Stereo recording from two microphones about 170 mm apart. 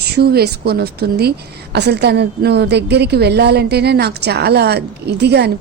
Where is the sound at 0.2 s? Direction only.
70° right (ahead or behind).